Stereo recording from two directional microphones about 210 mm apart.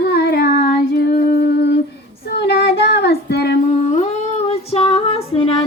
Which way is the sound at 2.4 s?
45° left (ahead or behind).